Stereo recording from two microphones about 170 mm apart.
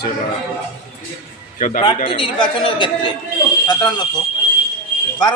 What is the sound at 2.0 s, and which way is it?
Speech, 30° left (ahead or behind).